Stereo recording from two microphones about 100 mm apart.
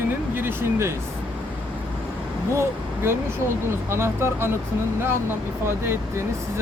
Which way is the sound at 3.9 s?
25° right (ahead or behind).